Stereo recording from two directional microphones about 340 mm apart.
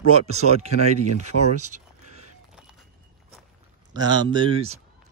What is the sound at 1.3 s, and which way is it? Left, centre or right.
Speech, left.